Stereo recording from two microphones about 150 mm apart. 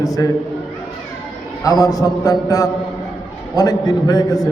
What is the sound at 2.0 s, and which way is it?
A man's voice, 20° left (ahead or behind).